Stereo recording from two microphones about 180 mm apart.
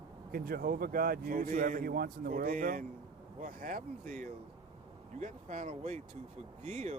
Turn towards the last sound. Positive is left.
turn(degrees=-40)  # may be behind; listen again after turning